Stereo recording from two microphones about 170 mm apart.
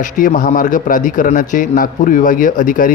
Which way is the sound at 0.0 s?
50° left (ahead or behind).